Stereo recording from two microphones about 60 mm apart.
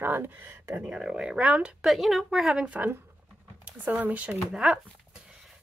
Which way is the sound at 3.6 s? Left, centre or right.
Right.